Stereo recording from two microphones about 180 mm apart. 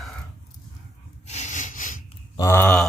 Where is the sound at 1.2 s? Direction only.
40° left (ahead or behind).